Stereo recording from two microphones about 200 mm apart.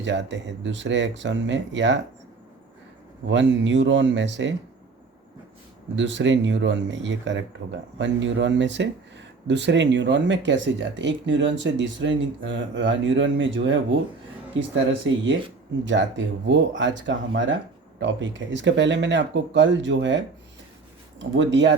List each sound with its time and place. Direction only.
0.0 s speech: 65° right (ahead or behind)
3.2 s speech: 65° right (ahead or behind)
6.0 s speech: 65° right (ahead or behind)
15.8 s speech: 65° right (ahead or behind)